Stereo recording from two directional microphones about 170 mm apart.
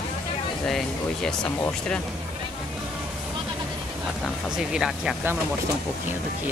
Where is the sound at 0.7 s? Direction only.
Centre (ahead or behind).